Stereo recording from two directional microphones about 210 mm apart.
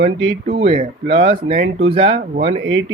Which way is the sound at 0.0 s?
30° right (ahead or behind).